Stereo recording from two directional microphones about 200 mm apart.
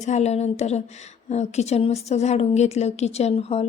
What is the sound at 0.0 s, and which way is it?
Speech, 35° left (ahead or behind).